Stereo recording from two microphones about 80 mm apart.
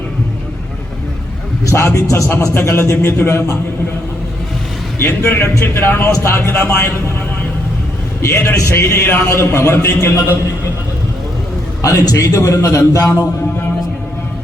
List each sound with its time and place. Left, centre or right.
1.6 s a man's voice: left
4.9 s a man's voice: left
8.2 s a man's voice: left
11.8 s a man's voice: left